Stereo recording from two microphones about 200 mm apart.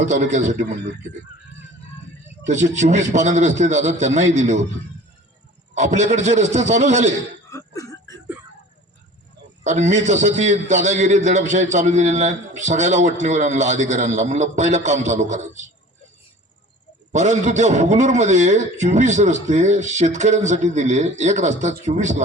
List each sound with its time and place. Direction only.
0.0 s a man's voice: 35° right (ahead or behind)
2.5 s a man's voice: 35° right (ahead or behind)
5.7 s a man's voice: 35° right (ahead or behind)
7.5 s cough: 15° left (ahead or behind)
9.6 s a man's voice: 35° right (ahead or behind)
17.1 s a man's voice: 35° right (ahead or behind)